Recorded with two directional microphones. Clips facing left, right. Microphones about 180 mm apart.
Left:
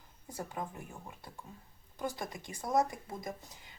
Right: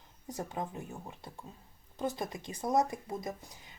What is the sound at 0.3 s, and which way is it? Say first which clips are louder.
Speech: right 3 dB; 20° right (ahead or behind).